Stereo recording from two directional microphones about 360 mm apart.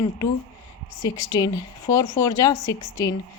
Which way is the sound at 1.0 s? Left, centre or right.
Centre.